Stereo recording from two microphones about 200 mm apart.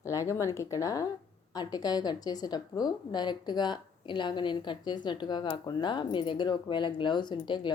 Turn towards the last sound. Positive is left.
turn(degrees=20)  # may be behind; listen again after turning